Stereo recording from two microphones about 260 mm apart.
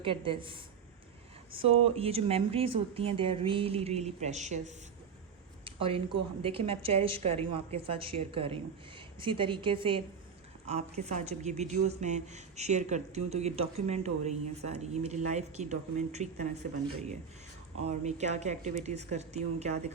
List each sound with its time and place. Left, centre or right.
0.0 s speech: centre
1.8 s speech: right
17.8 s speech: right